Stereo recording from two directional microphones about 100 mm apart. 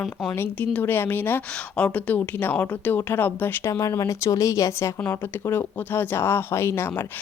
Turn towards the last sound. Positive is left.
turn(degrees=25)  # may be behind; listen again after turning